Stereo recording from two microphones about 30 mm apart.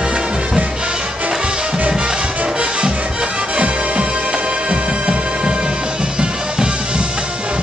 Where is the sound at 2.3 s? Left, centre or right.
Right.